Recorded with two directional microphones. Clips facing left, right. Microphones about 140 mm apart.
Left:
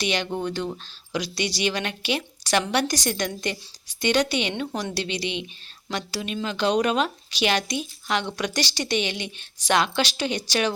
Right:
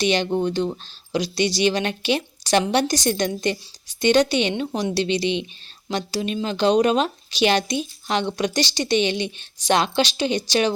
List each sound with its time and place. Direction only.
0.0 s speech: 25° right (ahead or behind)